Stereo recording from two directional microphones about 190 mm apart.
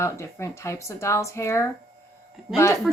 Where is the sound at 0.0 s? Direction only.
15° left (ahead or behind).